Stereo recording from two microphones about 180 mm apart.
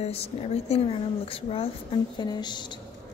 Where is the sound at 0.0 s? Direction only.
35° left (ahead or behind).